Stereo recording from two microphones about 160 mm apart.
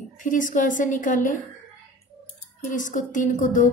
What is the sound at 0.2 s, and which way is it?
A woman's voice, 55° left (ahead or behind).